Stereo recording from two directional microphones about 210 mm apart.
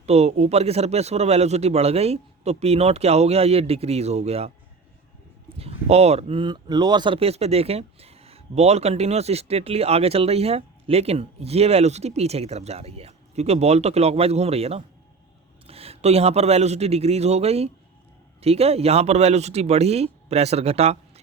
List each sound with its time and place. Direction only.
0.0 s speech: 30° right (ahead or behind)
5.5 s a man's voice: 30° right (ahead or behind)